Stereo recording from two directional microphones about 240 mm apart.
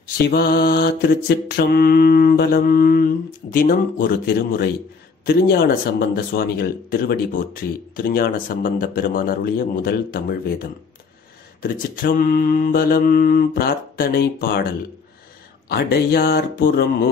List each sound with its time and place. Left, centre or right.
0.3 s mantra: left
11.6 s mantra: left
15.7 s mantra: left